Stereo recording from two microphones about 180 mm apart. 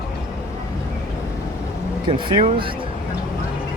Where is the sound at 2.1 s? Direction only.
30° right (ahead or behind).